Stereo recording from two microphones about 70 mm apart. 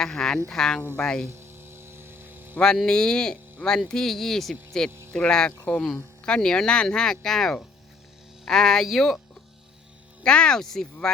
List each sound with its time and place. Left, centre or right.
0.0 s speech: centre
1.3 s hum: right
2.6 s speech: centre
10.2 s speech: centre